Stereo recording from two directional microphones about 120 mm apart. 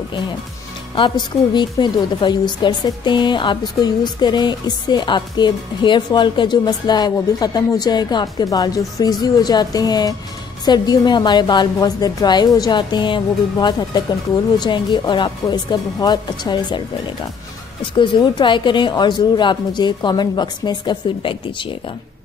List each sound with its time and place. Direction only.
0.9 s a woman's voice: 40° left (ahead or behind)
17.9 s a woman's voice: 40° left (ahead or behind)